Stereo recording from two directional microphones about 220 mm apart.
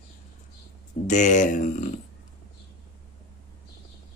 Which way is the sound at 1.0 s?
35° left (ahead or behind).